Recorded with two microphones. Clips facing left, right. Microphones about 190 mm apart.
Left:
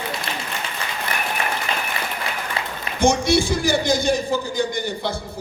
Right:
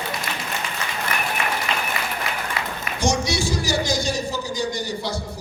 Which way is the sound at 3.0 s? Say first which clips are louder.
Left 5 dB; 55° left (ahead or behind).